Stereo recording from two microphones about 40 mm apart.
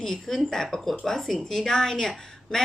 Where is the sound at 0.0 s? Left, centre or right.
Centre.